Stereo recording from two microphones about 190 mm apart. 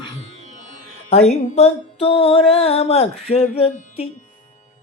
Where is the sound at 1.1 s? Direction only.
35° left (ahead or behind).